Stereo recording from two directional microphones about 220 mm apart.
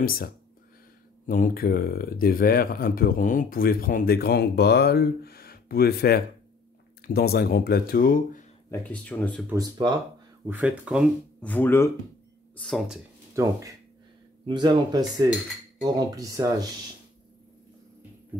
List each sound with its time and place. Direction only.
0.0 s speech: 40° left (ahead or behind)
8.6 s speech: 10° left (ahead or behind)
9.5 s speech: 20° right (ahead or behind)
10.4 s speech: 5° right (ahead or behind)
11.4 s speech: 10° left (ahead or behind)
13.3 s speech: 15° right (ahead or behind)